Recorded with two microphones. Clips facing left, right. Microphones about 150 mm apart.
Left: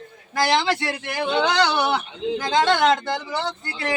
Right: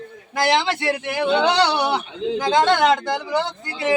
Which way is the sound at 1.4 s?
30° right (ahead or behind).